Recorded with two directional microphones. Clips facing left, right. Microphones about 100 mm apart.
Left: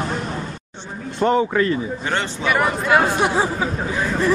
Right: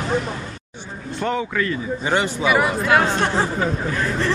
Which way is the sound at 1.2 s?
30° left (ahead or behind).